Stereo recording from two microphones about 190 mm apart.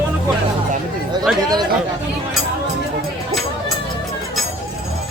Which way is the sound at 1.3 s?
5° right (ahead or behind).